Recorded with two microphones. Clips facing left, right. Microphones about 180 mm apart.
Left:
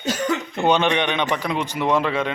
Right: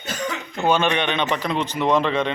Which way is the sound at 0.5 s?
15° left (ahead or behind).